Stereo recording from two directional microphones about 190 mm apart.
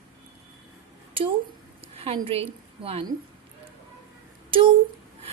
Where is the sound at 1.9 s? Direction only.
30° right (ahead or behind).